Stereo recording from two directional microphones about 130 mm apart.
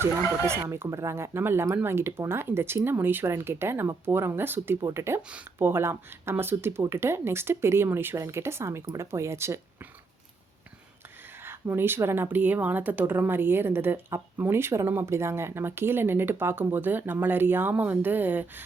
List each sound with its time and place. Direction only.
0.3 s speech: 20° right (ahead or behind)
11.4 s a woman's voice: 15° right (ahead or behind)